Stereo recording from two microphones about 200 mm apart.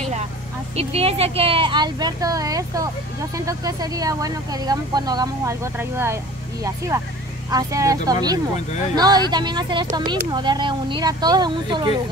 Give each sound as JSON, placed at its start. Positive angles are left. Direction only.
{"t": 0.7, "sound": "a woman's voice", "side_deg": -30}
{"t": 7.5, "sound": "a woman's voice", "side_deg": -15}